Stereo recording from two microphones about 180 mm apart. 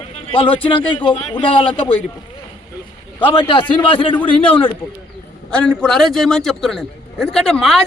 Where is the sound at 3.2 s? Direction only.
25° left (ahead or behind).